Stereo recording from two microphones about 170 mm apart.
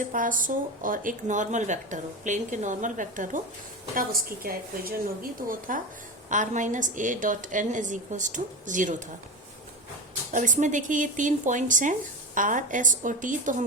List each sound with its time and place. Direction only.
0.1 s a woman's voice: 50° right (ahead or behind)
10.3 s speech: 45° right (ahead or behind)